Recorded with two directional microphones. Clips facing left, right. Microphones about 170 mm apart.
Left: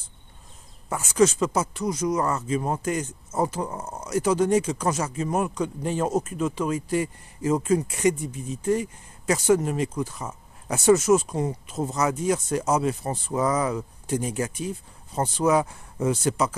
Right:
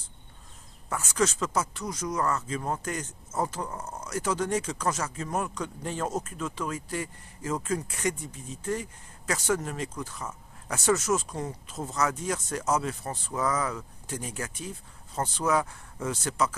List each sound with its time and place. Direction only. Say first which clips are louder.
0.8 s speech: left 7 dB; 15° left (ahead or behind)
4.1 s speech: left 8 dB; 15° left (ahead or behind)